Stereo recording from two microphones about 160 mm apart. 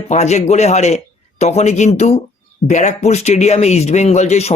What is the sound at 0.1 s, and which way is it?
Speech, 45° left (ahead or behind).